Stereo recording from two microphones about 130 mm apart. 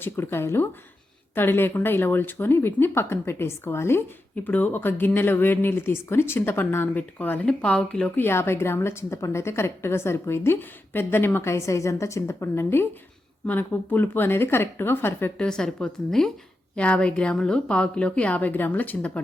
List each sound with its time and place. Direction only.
0.0 s speech: 20° left (ahead or behind)
15.4 s a woman's voice: 5° left (ahead or behind)